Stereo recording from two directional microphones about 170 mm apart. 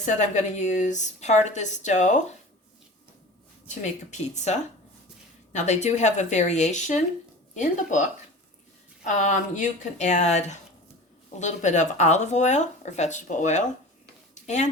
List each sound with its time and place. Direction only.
0.0 s speech: 45° left (ahead or behind)
3.7 s speech: 45° left (ahead or behind)